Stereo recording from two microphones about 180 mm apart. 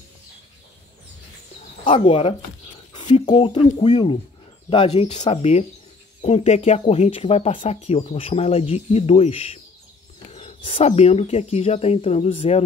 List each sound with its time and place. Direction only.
1.9 s speech: 30° left (ahead or behind)
3.0 s a sound: 40° left (ahead or behind)
3.3 s speech: 30° left (ahead or behind)